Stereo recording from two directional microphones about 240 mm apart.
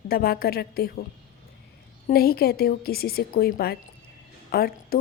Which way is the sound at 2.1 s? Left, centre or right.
Left.